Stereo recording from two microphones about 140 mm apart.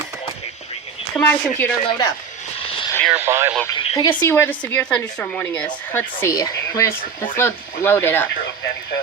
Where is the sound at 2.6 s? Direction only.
40° left (ahead or behind).